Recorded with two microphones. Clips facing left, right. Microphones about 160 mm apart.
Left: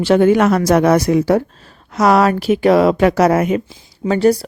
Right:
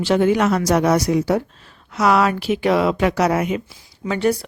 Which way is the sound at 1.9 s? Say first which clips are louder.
Left 4 dB; 40° left (ahead or behind).